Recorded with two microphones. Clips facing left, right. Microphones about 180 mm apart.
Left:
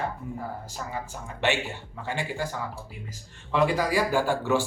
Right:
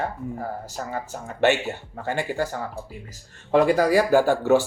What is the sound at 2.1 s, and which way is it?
Speech, 50° right (ahead or behind).